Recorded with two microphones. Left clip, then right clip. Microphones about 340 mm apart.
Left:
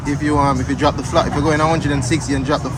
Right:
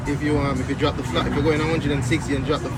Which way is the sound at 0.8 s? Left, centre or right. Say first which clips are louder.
Left 8 dB; centre.